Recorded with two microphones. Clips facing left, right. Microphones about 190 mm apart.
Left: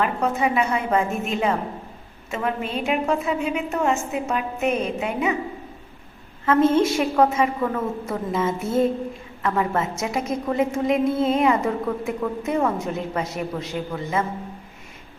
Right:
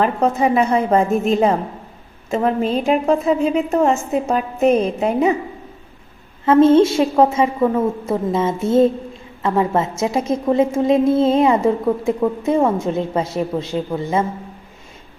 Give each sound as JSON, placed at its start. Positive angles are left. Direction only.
{"t": 0.0, "sound": "a woman's voice", "side_deg": -35}
{"t": 6.4, "sound": "a woman's voice", "side_deg": -25}